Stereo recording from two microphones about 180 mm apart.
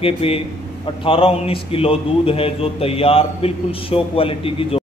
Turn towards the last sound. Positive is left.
turn(degrees=30)  # may be behind; listen again after turning